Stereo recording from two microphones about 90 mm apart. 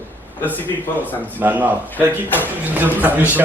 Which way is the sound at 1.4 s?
20° right (ahead or behind).